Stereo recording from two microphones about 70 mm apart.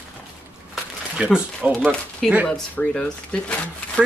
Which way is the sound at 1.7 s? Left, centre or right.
Centre.